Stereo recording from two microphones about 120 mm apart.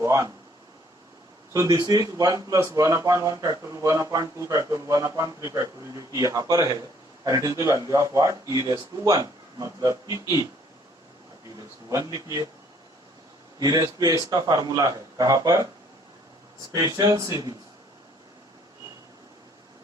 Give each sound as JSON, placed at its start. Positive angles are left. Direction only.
{"t": 0.0, "sound": "a sound", "side_deg": -25}
{"t": 1.5, "sound": "speech", "side_deg": -30}
{"t": 11.9, "sound": "speech", "side_deg": -30}
{"t": 13.6, "sound": "speech", "side_deg": -30}
{"t": 16.7, "sound": "speech", "side_deg": -30}